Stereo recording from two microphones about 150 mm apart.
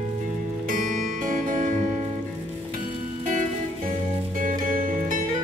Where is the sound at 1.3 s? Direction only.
60° right (ahead or behind).